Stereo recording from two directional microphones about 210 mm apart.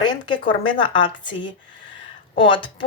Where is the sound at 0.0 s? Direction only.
20° left (ahead or behind).